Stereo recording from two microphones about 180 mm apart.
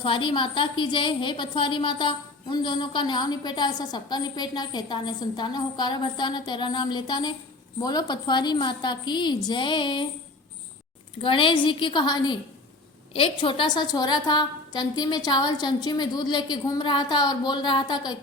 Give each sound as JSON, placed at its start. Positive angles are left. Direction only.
{"t": 0.0, "sound": "a woman's voice", "side_deg": 30}
{"t": 11.2, "sound": "a woman's voice", "side_deg": 30}